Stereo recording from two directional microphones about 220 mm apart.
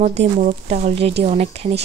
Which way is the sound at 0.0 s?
30° right (ahead or behind).